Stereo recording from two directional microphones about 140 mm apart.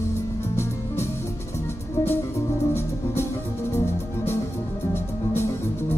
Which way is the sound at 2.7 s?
15° left (ahead or behind).